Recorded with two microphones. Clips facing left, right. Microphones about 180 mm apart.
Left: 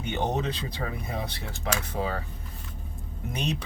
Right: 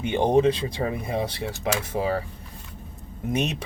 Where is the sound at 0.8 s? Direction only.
25° right (ahead or behind).